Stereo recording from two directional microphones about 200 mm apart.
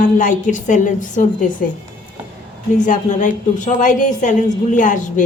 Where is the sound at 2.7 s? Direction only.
40° left (ahead or behind).